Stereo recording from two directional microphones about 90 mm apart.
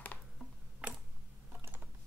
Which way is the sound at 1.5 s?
25° right (ahead or behind).